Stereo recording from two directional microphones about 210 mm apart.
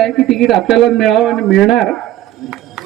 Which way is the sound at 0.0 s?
Centre (ahead or behind).